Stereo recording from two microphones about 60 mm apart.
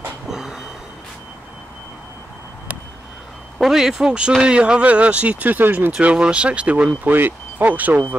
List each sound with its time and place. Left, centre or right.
0.3 s vehicle: centre
3.5 s speech: centre; by 5.9 s right
5.9 s speech: centre
7.1 s speech: right